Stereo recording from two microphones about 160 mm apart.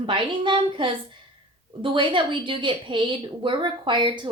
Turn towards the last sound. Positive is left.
turn(degrees=-30)  # may be behind; listen again after turning